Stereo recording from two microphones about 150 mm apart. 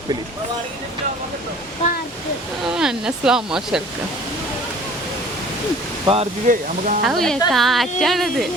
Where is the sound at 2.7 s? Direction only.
5° right (ahead or behind).